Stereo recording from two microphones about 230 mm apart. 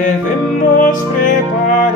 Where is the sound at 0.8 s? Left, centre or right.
Left.